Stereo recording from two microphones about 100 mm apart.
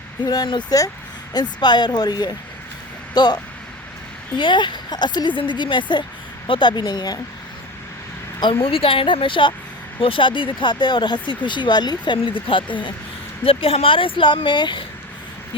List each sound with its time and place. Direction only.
0.3 s speech: 50° left (ahead or behind)
8.6 s speech: 65° left (ahead or behind)
13.4 s speech: 70° left (ahead or behind); by 14.8 s 50° left (ahead or behind)